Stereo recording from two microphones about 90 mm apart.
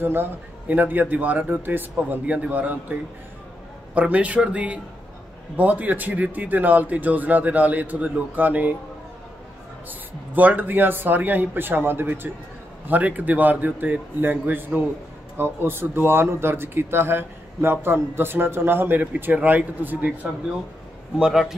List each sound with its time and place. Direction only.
0.0 s a man's voice: 25° right (ahead or behind)
10.3 s a man's voice: 20° right (ahead or behind)
21.2 s a man's voice: 5° right (ahead or behind)